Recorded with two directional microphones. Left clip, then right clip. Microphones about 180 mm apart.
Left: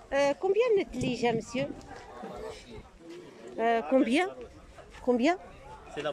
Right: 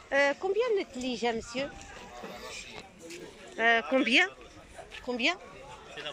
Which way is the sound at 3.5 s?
15° left (ahead or behind).